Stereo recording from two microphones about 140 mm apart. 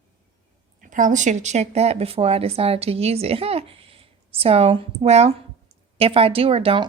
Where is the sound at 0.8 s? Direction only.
65° right (ahead or behind).